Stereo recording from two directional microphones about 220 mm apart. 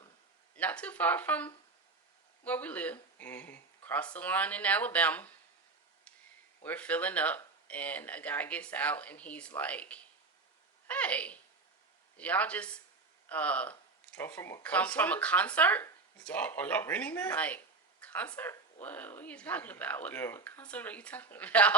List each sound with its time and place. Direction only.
0.5 s speech: 5° left (ahead or behind)
6.7 s speech: 5° left (ahead or behind)